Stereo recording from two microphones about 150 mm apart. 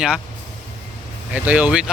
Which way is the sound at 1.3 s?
10° right (ahead or behind).